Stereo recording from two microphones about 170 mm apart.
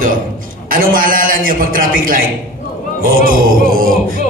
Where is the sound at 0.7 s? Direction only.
55° right (ahead or behind).